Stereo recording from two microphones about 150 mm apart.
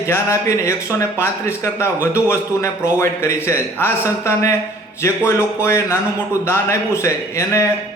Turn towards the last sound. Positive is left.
turn(degrees=20)  # may be behind; listen again after turning